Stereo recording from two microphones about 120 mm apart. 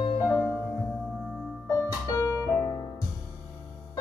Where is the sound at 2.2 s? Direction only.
25° left (ahead or behind).